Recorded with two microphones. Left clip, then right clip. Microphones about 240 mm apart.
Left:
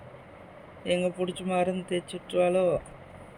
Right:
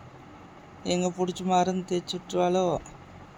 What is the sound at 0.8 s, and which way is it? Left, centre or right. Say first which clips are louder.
Speech: even; centre.